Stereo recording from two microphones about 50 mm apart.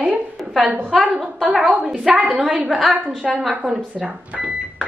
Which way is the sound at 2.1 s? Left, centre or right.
Right.